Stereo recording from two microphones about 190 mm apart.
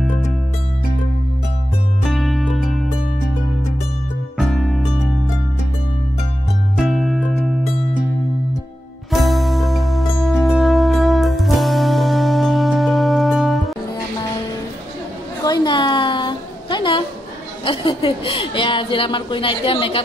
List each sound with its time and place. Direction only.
2.0 s music: centre (ahead or behind)
4.4 s music: centre (ahead or behind)
6.8 s music: centre (ahead or behind)
9.1 s music: centre (ahead or behind)
15.4 s a sound: 20° left (ahead or behind)